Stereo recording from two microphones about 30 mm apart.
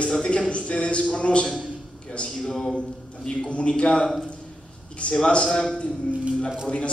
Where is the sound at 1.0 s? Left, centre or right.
Left.